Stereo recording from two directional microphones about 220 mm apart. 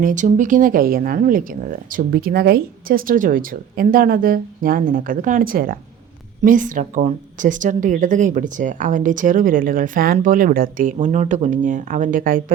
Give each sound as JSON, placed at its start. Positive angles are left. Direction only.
{"t": 0.0, "sound": "speech", "side_deg": -35}